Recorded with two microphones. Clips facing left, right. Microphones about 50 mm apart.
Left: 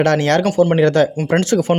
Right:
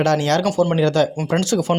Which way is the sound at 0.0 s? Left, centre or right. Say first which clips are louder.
Left 3 dB; left.